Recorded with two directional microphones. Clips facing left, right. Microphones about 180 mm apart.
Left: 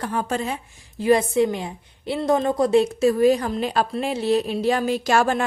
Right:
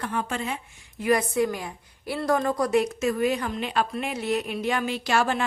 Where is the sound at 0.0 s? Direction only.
35° left (ahead or behind).